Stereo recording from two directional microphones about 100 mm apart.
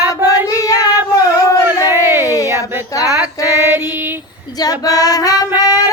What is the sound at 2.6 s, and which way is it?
Speech, 35° left (ahead or behind).